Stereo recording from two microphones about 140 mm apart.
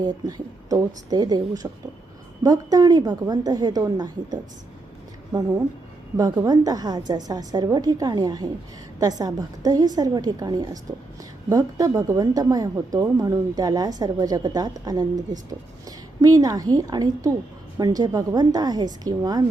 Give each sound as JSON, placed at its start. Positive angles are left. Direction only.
{"t": 0.3, "sound": "speech", "side_deg": -25}